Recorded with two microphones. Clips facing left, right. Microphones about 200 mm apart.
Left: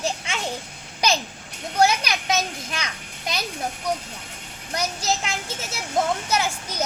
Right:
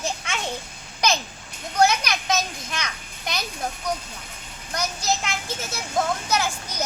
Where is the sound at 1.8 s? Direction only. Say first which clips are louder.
Even; 30° left (ahead or behind).